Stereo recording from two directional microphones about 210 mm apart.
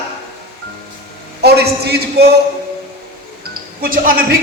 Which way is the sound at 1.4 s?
50° right (ahead or behind).